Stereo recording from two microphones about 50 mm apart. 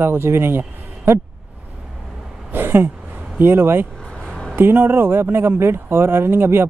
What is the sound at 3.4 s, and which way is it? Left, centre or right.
Speech, right.